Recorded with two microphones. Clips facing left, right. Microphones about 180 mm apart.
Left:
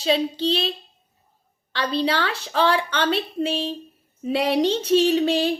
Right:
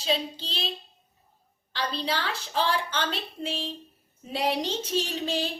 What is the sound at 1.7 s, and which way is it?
Speech, 70° left (ahead or behind).